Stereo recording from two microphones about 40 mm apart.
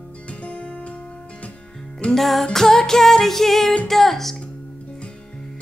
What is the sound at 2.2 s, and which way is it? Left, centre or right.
Music, centre.